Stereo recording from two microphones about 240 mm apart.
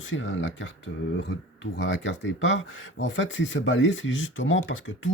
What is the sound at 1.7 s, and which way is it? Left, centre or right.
Speech, left.